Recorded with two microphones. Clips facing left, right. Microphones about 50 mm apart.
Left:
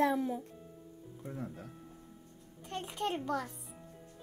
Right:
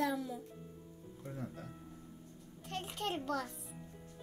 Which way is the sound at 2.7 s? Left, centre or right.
Centre.